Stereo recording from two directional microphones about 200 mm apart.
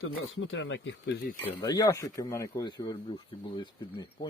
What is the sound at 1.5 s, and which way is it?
Speech, 20° left (ahead or behind).